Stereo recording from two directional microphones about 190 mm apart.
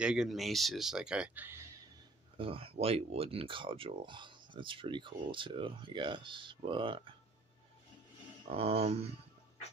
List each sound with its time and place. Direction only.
0.0 s speech: 5° right (ahead or behind)
2.3 s speech: 30° right (ahead or behind)
8.5 s speech: 30° right (ahead or behind)